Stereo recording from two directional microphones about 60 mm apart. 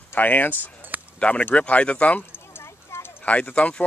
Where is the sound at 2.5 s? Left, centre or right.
Left.